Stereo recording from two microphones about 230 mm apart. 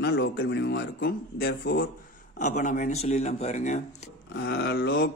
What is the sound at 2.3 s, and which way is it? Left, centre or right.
Speech, left.